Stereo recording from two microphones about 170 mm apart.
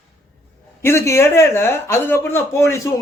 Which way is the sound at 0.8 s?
15° left (ahead or behind).